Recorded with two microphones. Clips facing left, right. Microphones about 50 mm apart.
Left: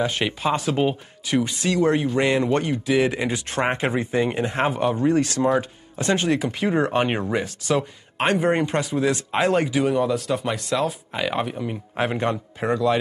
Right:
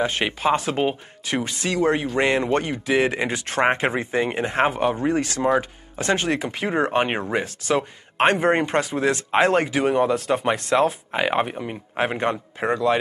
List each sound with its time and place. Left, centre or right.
0.0 s speech: right
3.6 s speech: right
7.3 s speech: right